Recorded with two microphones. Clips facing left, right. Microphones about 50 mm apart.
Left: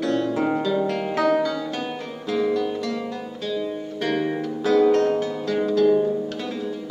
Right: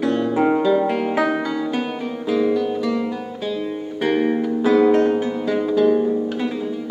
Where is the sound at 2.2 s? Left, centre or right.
Centre.